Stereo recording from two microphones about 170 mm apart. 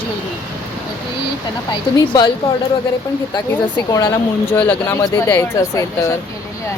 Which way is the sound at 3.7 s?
15° left (ahead or behind).